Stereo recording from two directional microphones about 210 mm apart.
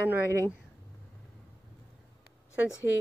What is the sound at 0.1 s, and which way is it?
Speech, 10° right (ahead or behind).